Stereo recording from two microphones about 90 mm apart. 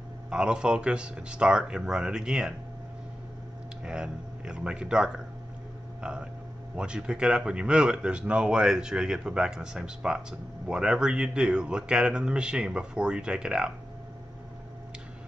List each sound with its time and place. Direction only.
0.3 s speech: 10° right (ahead or behind)
3.8 s speech: 10° right (ahead or behind)